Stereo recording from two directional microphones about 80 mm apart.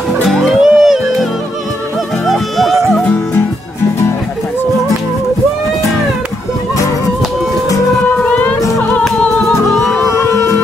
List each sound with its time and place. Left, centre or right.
0.2 s music: centre
2.2 s music: centre
3.0 s music: centre
8.2 s music: centre
10.0 s music: left